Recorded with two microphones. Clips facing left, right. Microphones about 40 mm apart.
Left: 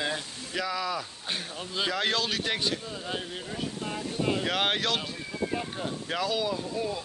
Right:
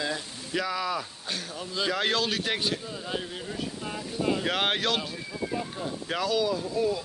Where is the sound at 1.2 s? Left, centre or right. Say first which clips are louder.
Even; left.